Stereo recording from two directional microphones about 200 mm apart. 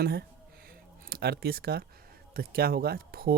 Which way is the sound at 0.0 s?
55° right (ahead or behind).